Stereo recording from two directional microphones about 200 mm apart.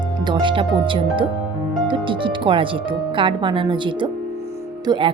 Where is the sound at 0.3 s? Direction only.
25° right (ahead or behind).